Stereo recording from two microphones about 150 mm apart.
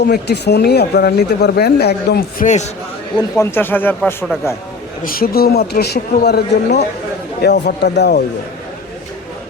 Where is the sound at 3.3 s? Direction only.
15° left (ahead or behind).